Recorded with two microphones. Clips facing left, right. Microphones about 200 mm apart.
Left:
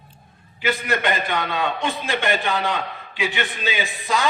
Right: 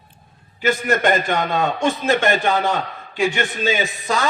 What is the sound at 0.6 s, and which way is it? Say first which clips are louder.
A man's voice: right 4 dB; 45° right (ahead or behind).